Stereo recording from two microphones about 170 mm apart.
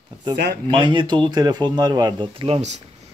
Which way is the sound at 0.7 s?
25° right (ahead or behind).